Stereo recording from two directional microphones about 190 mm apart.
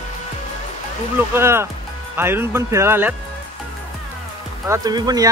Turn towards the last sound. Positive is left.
turn(degrees=-20)  # may be behind; listen again after turning